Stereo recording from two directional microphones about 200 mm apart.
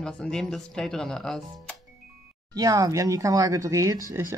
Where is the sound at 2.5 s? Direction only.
20° right (ahead or behind).